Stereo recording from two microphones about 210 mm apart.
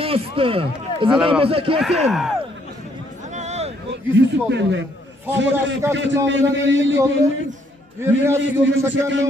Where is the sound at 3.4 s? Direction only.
30° right (ahead or behind).